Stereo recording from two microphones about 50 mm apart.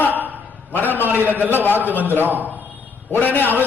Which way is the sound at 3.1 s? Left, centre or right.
Left.